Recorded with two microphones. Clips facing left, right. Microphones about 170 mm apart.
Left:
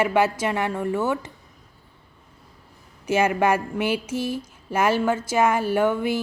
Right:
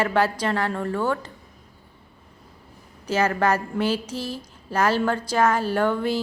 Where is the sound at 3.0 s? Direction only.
10° left (ahead or behind).